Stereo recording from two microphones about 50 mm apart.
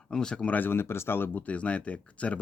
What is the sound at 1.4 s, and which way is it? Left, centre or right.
Speech, left.